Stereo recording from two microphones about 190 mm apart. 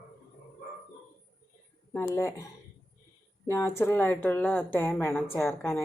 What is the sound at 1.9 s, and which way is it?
A woman's voice, 15° left (ahead or behind).